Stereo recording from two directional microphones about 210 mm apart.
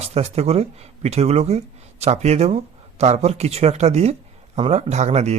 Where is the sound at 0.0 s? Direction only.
30° right (ahead or behind).